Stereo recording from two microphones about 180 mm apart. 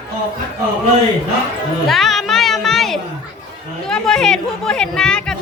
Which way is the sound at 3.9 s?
5° left (ahead or behind).